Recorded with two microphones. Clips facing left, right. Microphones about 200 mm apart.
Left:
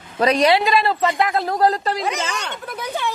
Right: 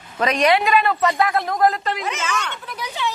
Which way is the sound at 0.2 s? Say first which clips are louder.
Left 2 dB; 35° left (ahead or behind).